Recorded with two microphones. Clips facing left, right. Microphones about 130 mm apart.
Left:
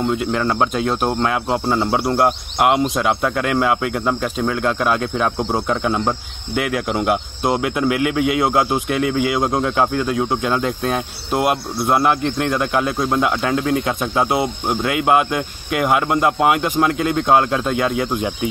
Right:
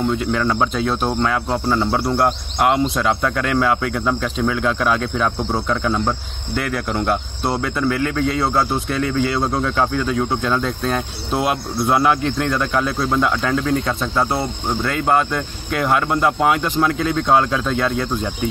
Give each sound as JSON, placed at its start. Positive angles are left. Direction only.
{"t": 0.1, "sound": "speech", "side_deg": 5}
{"t": 5.4, "sound": "speech", "side_deg": 20}
{"t": 6.5, "sound": "speech", "side_deg": 10}